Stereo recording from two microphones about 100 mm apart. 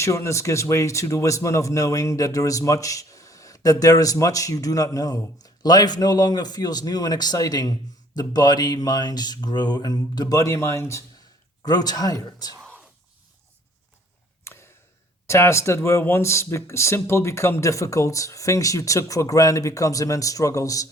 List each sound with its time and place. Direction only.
0.0 s speech: 30° left (ahead or behind)
11.6 s speech: 40° left (ahead or behind)
14.4 s a sound: 25° left (ahead or behind)
15.3 s speech: 25° left (ahead or behind)